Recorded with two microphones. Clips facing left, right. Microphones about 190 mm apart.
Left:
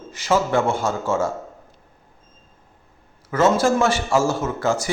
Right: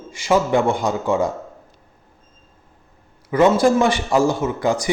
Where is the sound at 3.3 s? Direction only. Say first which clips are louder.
Right 3 dB; 15° right (ahead or behind).